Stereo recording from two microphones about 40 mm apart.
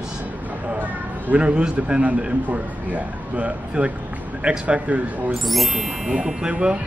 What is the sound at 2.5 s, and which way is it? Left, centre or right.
Speech, right.